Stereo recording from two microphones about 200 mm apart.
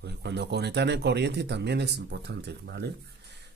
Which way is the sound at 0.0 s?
55° right (ahead or behind).